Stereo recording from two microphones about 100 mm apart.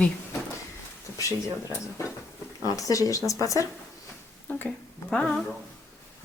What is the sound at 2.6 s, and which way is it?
Speech, 35° left (ahead or behind).